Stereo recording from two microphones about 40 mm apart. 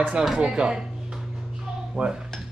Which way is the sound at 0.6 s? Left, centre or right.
Centre.